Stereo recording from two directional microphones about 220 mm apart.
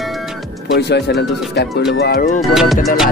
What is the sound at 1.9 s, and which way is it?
Speech, 45° left (ahead or behind).